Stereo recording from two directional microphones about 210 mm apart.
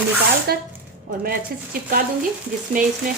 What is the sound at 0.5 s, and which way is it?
Speech, 50° right (ahead or behind).